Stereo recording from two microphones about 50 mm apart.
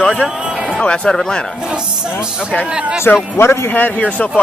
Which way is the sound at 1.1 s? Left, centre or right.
Centre.